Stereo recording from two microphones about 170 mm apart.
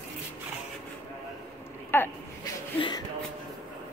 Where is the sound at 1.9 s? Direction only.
10° left (ahead or behind).